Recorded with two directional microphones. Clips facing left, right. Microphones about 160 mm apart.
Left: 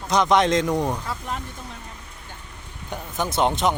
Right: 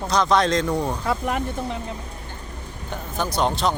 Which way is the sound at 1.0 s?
85° right.